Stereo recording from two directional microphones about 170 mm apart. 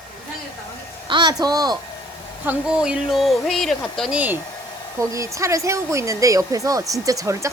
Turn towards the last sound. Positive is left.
turn(degrees=-20)  # may be behind; listen again after turning